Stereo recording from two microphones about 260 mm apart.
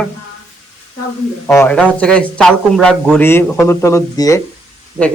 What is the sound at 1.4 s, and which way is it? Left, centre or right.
A man's voice, centre.